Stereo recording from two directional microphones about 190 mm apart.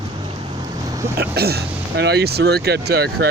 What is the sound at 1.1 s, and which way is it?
Speech, 55° right (ahead or behind).